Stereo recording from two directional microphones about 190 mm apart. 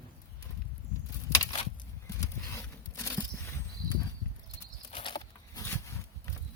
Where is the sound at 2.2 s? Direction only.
15° left (ahead or behind).